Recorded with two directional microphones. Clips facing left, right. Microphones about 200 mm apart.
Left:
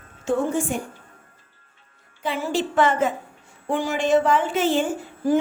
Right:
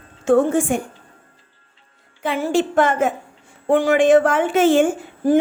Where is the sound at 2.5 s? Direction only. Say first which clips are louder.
Right 3 dB; 50° right (ahead or behind).